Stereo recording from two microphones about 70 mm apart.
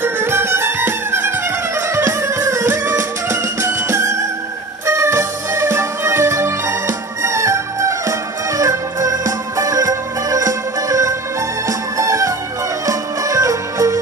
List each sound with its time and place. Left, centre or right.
0.0 s music: right